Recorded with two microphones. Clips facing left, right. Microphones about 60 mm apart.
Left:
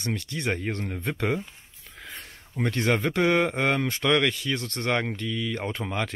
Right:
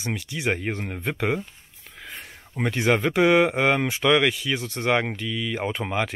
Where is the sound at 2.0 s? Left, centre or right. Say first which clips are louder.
Right 2 dB; centre.